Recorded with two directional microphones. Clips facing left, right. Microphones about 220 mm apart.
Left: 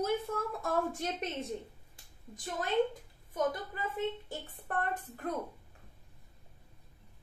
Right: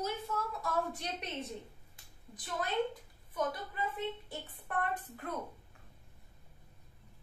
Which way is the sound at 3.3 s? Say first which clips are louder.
Left 3 dB; 45° left (ahead or behind).